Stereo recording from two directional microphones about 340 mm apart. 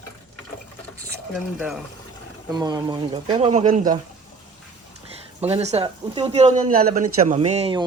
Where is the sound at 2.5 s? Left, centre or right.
Centre.